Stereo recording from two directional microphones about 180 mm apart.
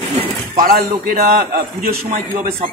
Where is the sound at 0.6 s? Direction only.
50° right (ahead or behind).